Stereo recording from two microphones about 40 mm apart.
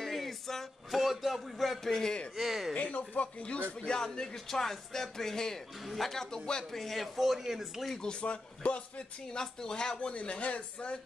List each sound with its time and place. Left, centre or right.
0.0 s a sound: centre
1.9 s speech: centre
2.3 s speech: centre
2.7 s speech: left
3.8 s speech: centre
8.0 s speech: left
9.4 s speech: centre
9.9 s speech: left